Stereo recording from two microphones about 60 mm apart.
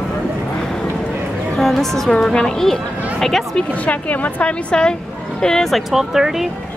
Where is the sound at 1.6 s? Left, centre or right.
Centre.